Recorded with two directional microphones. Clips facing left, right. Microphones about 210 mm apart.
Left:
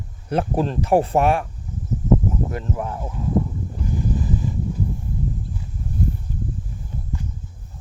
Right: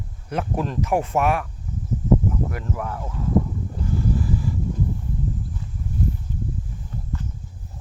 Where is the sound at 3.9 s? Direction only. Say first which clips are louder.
Even; 20° left (ahead or behind).